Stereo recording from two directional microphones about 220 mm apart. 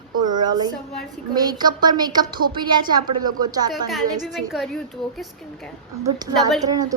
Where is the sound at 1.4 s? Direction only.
20° right (ahead or behind).